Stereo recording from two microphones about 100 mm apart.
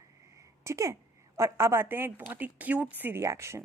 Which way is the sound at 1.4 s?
25° right (ahead or behind).